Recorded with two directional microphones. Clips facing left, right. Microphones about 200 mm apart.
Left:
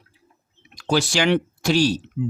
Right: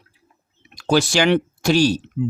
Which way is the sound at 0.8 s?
50° right (ahead or behind).